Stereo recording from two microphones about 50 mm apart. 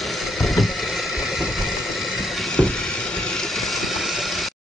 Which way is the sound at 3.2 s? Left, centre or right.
Centre.